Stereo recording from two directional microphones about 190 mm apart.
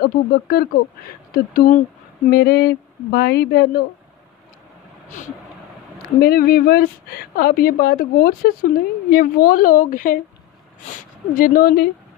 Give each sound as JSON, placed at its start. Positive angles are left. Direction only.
{"t": 0.0, "sound": "a woman's voice", "side_deg": 55}
{"t": 6.2, "sound": "a woman's voice", "side_deg": 55}